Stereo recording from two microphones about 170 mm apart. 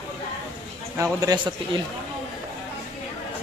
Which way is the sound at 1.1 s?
20° right (ahead or behind).